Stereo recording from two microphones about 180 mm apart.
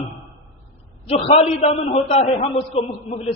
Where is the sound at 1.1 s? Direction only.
35° left (ahead or behind).